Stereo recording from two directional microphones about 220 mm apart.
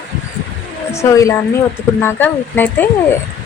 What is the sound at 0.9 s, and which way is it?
Speech, 15° left (ahead or behind).